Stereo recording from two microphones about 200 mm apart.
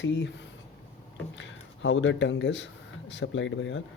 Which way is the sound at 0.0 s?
65° left (ahead or behind).